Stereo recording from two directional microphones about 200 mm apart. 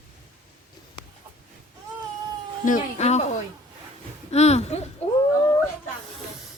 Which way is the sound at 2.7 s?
35° left (ahead or behind).